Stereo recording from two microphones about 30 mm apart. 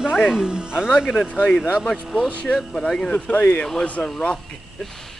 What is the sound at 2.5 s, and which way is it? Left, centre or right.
Speech, left.